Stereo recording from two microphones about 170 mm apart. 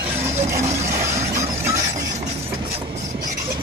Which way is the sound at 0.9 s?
15° right (ahead or behind).